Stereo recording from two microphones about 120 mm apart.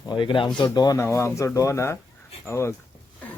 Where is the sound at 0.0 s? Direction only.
40° left (ahead or behind).